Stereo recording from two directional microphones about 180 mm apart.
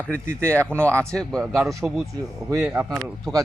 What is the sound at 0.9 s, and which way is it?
Speech, 5° left (ahead or behind).